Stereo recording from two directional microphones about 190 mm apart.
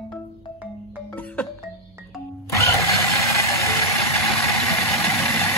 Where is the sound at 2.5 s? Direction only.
15° left (ahead or behind).